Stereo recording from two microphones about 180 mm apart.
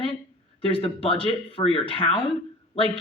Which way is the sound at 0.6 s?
30° left (ahead or behind).